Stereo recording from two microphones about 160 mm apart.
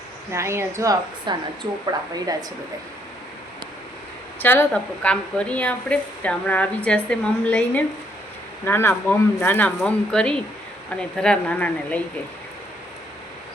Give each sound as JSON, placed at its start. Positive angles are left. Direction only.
{"t": 0.3, "sound": "a woman's voice", "side_deg": -15}
{"t": 4.4, "sound": "a woman's voice", "side_deg": 15}